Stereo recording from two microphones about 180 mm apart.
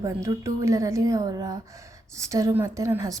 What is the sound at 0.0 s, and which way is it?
A woman's voice, 15° right (ahead or behind).